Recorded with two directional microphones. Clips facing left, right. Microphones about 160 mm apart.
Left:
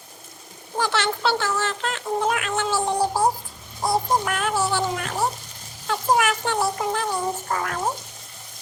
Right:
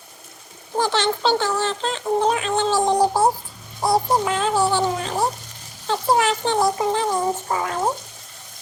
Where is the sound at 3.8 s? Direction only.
25° right (ahead or behind).